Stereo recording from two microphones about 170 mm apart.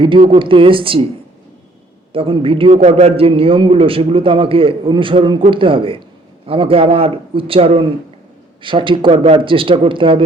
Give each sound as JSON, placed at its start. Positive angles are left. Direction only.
{"t": 0.0, "sound": "a man's voice", "side_deg": -30}
{"t": 2.1, "sound": "a man's voice", "side_deg": -30}